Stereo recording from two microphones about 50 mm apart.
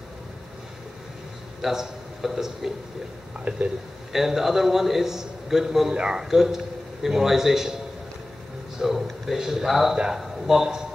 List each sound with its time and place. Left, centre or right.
1.6 s a man's voice: centre
3.5 s speech: right
4.1 s a man's voice: centre